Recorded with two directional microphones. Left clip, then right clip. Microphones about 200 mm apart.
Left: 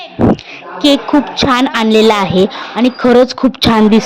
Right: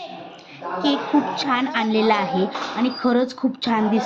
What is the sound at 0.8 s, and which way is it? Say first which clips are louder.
A woman's voice: left 10 dB; 50° left (ahead or behind).